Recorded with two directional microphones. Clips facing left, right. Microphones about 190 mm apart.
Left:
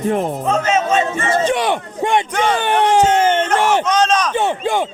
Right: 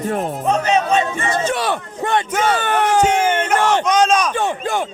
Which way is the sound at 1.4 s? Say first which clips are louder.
Left 3 dB; 20° left (ahead or behind).